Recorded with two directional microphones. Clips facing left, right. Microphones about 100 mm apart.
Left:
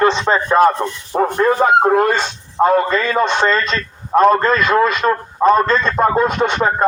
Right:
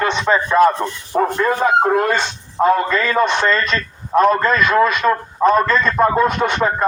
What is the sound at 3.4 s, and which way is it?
Speech, 25° left (ahead or behind).